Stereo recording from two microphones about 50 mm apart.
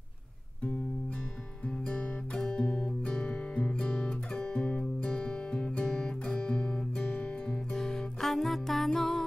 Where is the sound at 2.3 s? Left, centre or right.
Centre.